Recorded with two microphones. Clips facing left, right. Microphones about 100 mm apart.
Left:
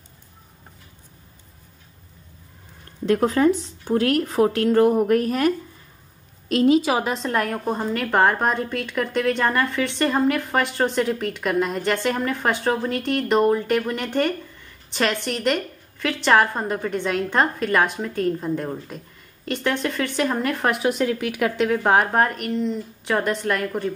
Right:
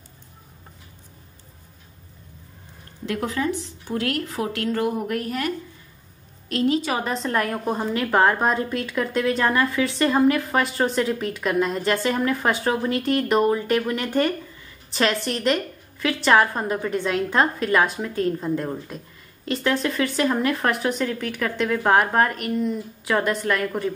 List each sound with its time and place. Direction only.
3.1 s a woman's voice: 40° left (ahead or behind)
6.9 s a woman's voice: 5° left (ahead or behind)